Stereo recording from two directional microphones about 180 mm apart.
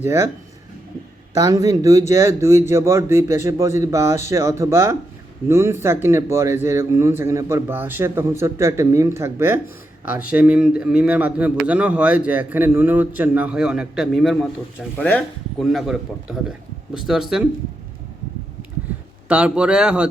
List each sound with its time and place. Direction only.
0.0 s speech: 15° right (ahead or behind)
1.3 s a man's voice: 20° right (ahead or behind); by 17.4 s centre (ahead or behind)
19.3 s speech: 5° right (ahead or behind)